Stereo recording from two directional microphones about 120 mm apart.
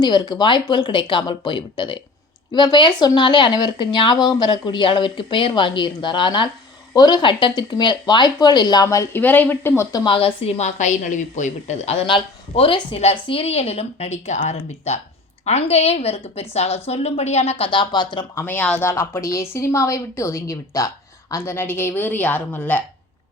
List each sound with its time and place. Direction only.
0.0 s speech: 35° left (ahead or behind)
9.2 s speech: 15° left (ahead or behind)
9.9 s a woman's voice: 40° left (ahead or behind); by 12.0 s 65° left (ahead or behind)
12.0 s a woman's voice: 50° left (ahead or behind); by 17.7 s 65° left (ahead or behind)
17.7 s speech: 40° left (ahead or behind)
18.3 s speech: 15° left (ahead or behind)
18.9 s a woman's voice: 25° left (ahead or behind)